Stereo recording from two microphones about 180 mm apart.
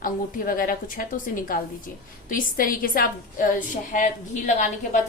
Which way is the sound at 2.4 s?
50° left (ahead or behind).